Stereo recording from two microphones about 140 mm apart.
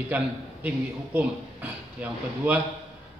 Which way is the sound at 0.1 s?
10° right (ahead or behind).